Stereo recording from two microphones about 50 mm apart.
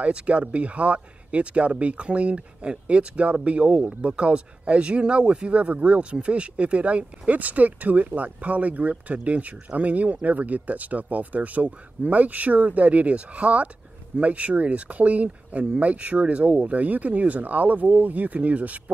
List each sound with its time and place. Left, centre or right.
0.0 s speech: right